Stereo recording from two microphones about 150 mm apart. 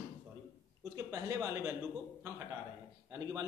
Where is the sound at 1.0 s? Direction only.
25° right (ahead or behind).